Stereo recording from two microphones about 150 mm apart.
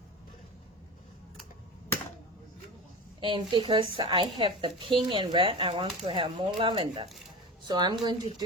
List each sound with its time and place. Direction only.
3.2 s a woman's voice: 35° right (ahead or behind)